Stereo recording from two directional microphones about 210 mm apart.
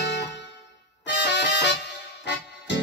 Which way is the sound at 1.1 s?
55° left (ahead or behind).